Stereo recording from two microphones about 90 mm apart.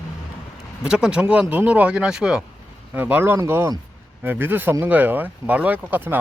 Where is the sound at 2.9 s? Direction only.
20° right (ahead or behind).